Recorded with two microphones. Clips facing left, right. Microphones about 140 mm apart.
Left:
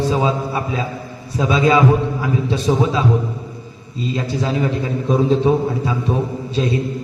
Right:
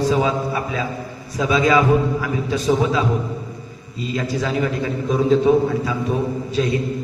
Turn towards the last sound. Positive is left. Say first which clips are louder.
# even
turn(degrees=30)  # may be behind; listen again after turning